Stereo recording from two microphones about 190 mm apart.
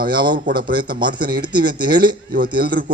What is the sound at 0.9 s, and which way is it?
Speech, 25° right (ahead or behind).